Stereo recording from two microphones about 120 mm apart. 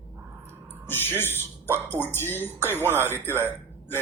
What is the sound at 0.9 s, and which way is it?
Speech, 20° left (ahead or behind).